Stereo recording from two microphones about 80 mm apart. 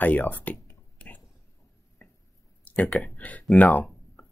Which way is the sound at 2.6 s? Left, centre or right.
Centre.